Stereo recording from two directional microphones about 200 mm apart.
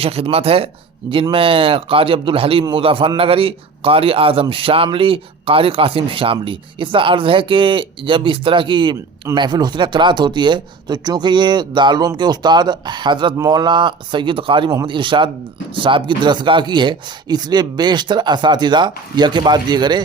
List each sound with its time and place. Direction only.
0.0 s a man's voice: 30° right (ahead or behind)